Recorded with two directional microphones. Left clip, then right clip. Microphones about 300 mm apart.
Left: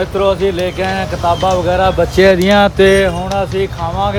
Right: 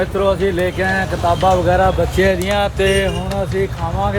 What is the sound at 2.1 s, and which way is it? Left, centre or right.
Speech, left.